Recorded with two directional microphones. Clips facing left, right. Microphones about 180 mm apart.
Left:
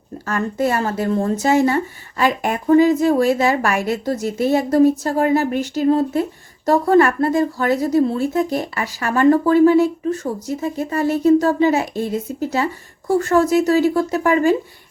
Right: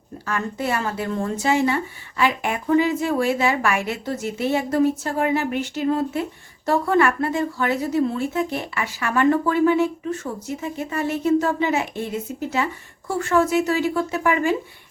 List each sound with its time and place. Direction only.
0.3 s speech: 45° left (ahead or behind)